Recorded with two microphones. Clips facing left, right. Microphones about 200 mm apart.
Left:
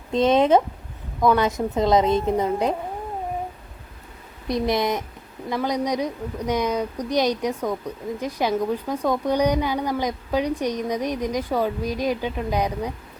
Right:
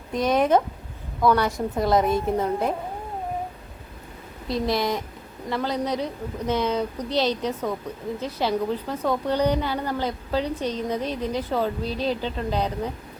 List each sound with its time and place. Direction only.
0.1 s speech: 25° left (ahead or behind)
4.4 s a woman's voice: 20° left (ahead or behind)